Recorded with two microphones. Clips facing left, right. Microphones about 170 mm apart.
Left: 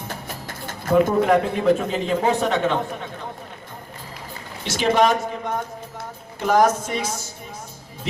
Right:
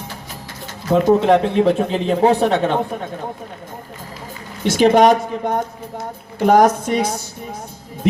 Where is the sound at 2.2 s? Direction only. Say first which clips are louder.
Right 8 dB; 35° right (ahead or behind).